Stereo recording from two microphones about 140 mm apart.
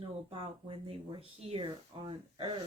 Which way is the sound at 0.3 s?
40° right (ahead or behind).